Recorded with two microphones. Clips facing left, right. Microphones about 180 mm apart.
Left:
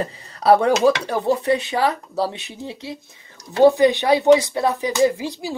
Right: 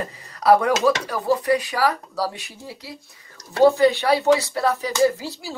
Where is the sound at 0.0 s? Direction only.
30° left (ahead or behind).